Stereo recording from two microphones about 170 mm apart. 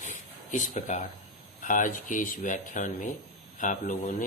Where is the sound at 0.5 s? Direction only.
45° left (ahead or behind).